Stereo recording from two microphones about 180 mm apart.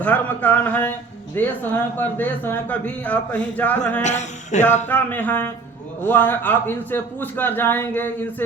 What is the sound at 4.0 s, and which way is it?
Speech, 40° left (ahead or behind).